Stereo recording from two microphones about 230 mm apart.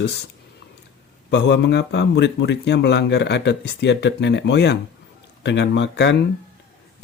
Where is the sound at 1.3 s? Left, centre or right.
Left.